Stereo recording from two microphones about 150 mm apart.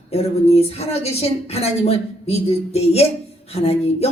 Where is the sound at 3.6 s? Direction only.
40° left (ahead or behind).